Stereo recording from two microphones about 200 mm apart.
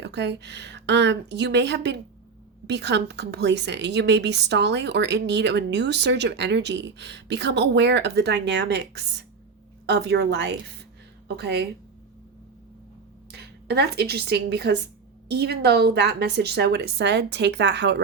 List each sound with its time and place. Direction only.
0.0 s a woman's voice: 60° right (ahead or behind)
13.3 s a woman's voice: 55° right (ahead or behind)